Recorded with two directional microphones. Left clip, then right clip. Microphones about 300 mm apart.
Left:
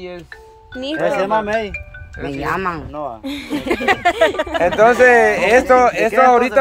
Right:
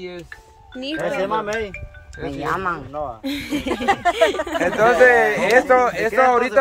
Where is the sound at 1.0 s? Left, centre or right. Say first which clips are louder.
Left 5 dB; left.